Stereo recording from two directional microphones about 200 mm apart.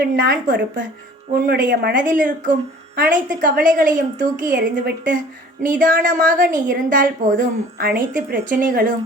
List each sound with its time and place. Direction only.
0.0 s a woman's voice: 50° right (ahead or behind)